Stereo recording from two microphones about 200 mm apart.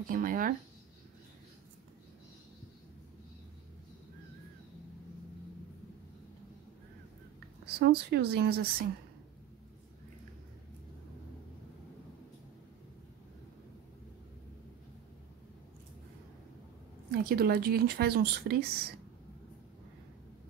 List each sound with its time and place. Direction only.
0.0 s speech: 45° right (ahead or behind)
7.8 s speech: 55° right (ahead or behind)
17.1 s speech: 50° right (ahead or behind)